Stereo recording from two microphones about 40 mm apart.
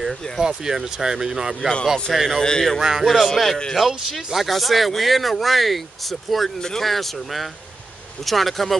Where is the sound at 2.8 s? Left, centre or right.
Centre.